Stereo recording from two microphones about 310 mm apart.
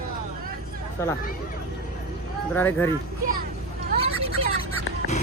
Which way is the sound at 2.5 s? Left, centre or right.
Centre.